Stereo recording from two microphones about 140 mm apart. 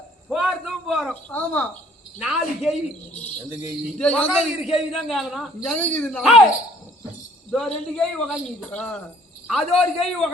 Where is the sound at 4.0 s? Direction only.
5° left (ahead or behind).